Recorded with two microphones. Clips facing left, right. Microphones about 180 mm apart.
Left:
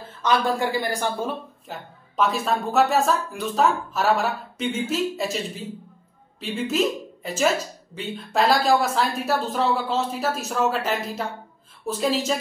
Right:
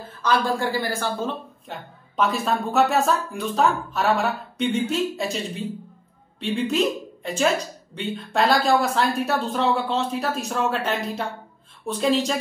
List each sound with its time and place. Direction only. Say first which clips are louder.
0.2 s speech: even; 20° left (ahead or behind)
1.7 s a woman's voice: right 2 dB; centre (ahead or behind)